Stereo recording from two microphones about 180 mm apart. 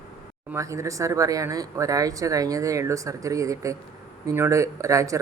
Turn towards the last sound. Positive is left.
turn(degrees=-15)  # may be behind; listen again after turning